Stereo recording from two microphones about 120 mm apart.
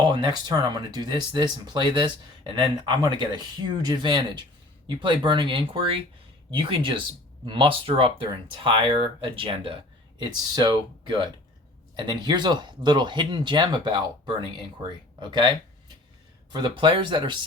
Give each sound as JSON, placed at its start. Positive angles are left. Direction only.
{"t": 0.0, "sound": "speech", "side_deg": -40}
{"t": 10.2, "sound": "speech", "side_deg": -35}